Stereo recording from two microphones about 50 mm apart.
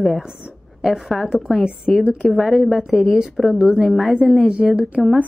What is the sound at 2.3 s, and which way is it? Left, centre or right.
A woman's voice, centre.